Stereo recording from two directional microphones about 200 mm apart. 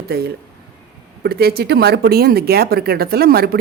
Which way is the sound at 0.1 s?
50° right (ahead or behind).